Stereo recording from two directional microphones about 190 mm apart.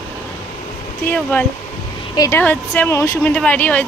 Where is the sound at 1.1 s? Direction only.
5° left (ahead or behind).